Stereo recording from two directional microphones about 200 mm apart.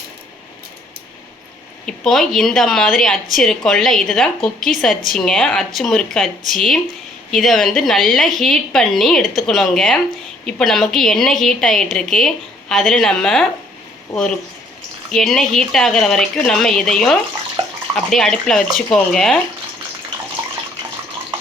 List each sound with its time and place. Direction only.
1.9 s a woman's voice: centre (ahead or behind)
15.1 s a woman's voice: centre (ahead or behind)
17.6 s bathtub: 25° right (ahead or behind)
17.9 s a woman's voice: 5° left (ahead or behind)